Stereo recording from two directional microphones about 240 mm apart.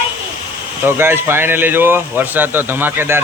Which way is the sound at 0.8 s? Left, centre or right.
Centre.